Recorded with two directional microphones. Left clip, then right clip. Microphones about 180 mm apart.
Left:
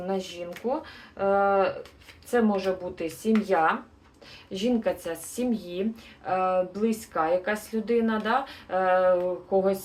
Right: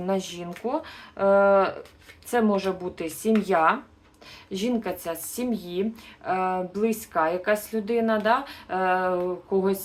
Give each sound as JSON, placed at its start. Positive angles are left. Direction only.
{"t": 0.0, "sound": "speech", "side_deg": -40}